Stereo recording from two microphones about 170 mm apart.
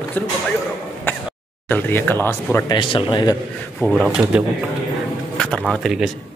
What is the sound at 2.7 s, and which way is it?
Speech, 30° left (ahead or behind).